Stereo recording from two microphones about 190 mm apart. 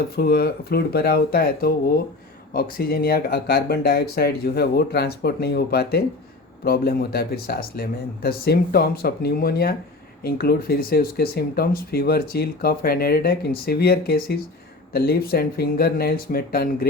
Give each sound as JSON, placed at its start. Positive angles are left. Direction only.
{"t": 0.2, "sound": "speech", "side_deg": 50}